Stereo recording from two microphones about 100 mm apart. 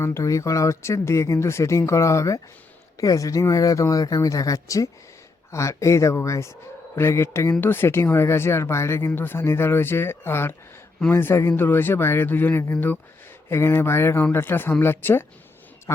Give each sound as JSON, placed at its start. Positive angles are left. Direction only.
{"t": 0.0, "sound": "speech", "side_deg": 30}